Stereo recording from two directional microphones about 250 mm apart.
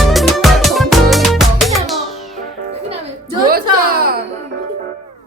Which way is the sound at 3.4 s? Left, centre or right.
Right.